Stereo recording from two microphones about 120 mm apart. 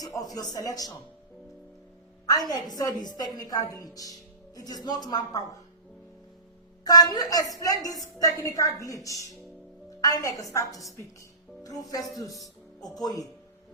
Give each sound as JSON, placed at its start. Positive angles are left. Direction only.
{"t": 0.0, "sound": "a woman's voice", "side_deg": 30}
{"t": 2.5, "sound": "a woman's voice", "side_deg": 30}
{"t": 6.8, "sound": "a woman's voice", "side_deg": 35}